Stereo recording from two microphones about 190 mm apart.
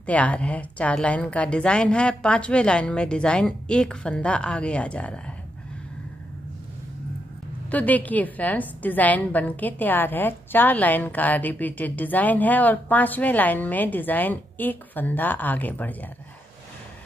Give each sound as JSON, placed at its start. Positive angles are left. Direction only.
{"t": 0.0, "sound": "a woman's voice", "side_deg": 5}
{"t": 7.7, "sound": "a woman's voice", "side_deg": 10}